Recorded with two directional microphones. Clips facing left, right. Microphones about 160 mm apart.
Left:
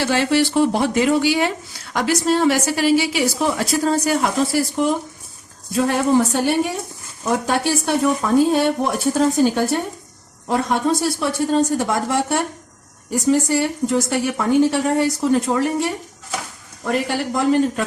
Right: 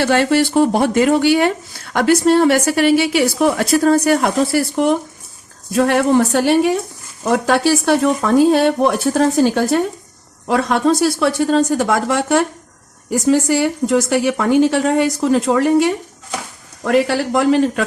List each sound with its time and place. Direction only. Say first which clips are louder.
0.0 s speech: right 3 dB; 55° right (ahead or behind); by 17.8 s 85° right